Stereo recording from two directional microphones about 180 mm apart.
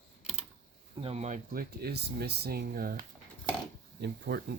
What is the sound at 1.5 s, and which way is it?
Speech, 60° right (ahead or behind).